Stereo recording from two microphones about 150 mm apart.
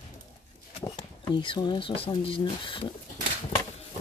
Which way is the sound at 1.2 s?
35° left (ahead or behind).